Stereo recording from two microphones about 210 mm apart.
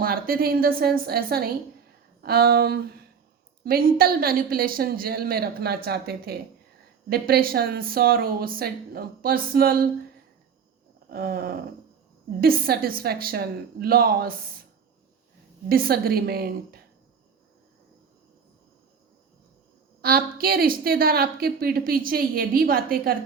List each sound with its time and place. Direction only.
0.0 s a woman's voice: 45° right (ahead or behind)
11.1 s a woman's voice: 50° right (ahead or behind)
15.7 s a woman's voice: 45° right (ahead or behind)
20.0 s a woman's voice: 45° right (ahead or behind)